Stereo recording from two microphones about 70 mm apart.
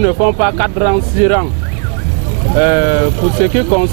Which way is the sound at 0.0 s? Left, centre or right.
Centre.